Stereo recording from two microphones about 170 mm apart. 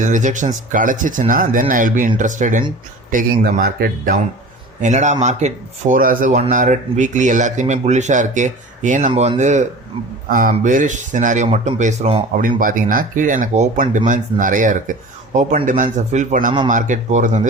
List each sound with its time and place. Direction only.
0.0 s speech: 45° right (ahead or behind)
4.8 s speech: 45° right (ahead or behind)
10.2 s speech: 55° right (ahead or behind); by 12.2 s 40° right (ahead or behind)
12.4 s speech: 55° right (ahead or behind)